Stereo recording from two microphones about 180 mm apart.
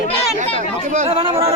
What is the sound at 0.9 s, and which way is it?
Speech, 35° right (ahead or behind).